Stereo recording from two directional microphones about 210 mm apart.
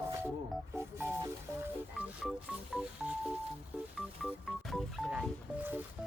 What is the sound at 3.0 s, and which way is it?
Telephone dialing, 5° right (ahead or behind).